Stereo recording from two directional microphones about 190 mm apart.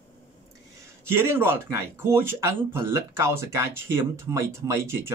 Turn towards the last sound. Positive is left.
turn(degrees=-15)  # may be behind; listen again after turning